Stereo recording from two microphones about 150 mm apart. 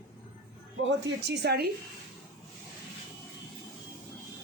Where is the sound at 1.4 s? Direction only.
90° right.